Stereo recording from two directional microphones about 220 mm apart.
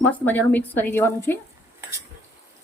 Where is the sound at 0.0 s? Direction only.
10° left (ahead or behind).